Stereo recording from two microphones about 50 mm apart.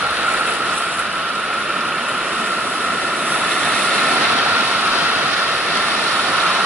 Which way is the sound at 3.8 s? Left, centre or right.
Centre.